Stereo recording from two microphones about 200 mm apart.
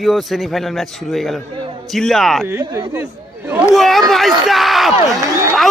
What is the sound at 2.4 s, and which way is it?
Speech, 15° right (ahead or behind).